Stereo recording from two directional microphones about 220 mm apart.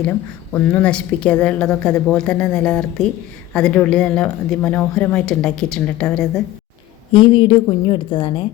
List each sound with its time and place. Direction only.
0.5 s speech: 5° left (ahead or behind)
7.1 s a woman's voice: 25° left (ahead or behind)